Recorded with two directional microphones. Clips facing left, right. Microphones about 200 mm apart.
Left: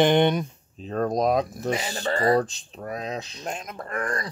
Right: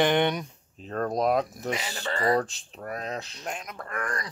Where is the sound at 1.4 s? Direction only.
35° left (ahead or behind).